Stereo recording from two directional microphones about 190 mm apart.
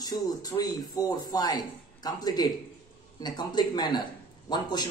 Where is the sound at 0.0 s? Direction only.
20° left (ahead or behind).